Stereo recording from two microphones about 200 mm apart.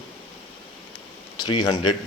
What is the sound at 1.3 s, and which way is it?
Speech, 20° left (ahead or behind).